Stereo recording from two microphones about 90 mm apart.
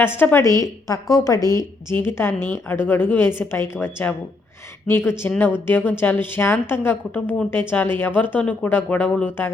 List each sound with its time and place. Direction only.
0.0 s a woman's voice: 25° left (ahead or behind)
0.4 s a woman's voice: 35° left (ahead or behind)
2.0 s a woman's voice: 25° left (ahead or behind)